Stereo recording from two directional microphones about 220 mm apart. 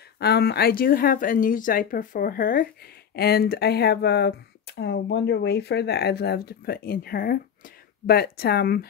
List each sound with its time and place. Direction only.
0.2 s speech: 45° left (ahead or behind)